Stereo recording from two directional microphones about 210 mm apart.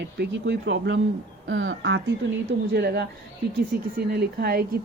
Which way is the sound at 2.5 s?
50° right (ahead or behind).